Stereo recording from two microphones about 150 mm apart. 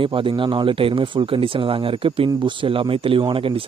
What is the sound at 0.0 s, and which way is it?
Speech, 35° right (ahead or behind).